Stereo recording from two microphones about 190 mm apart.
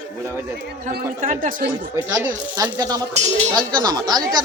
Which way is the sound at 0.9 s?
45° right (ahead or behind).